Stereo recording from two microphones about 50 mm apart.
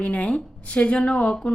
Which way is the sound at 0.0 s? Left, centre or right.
Left.